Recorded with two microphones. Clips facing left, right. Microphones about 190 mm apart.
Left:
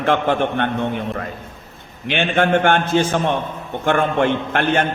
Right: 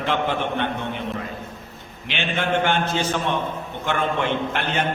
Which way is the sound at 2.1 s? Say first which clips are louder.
Left 7 dB; 50° left (ahead or behind).